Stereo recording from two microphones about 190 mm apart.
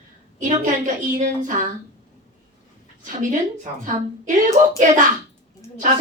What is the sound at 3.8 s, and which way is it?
A woman's voice, 40° right (ahead or behind).